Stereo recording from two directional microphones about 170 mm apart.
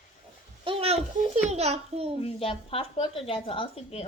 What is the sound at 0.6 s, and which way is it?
Speech, 35° right (ahead or behind).